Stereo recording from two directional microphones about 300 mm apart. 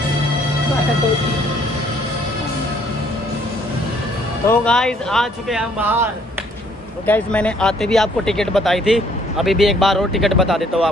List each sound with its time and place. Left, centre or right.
4.5 s speech: centre
7.1 s speech: centre